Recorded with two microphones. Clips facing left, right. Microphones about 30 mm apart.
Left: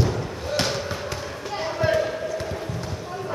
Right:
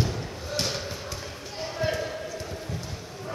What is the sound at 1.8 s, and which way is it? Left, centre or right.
Basketball bounce, left.